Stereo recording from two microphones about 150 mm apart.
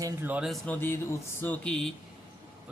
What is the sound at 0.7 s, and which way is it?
Speech, 15° left (ahead or behind).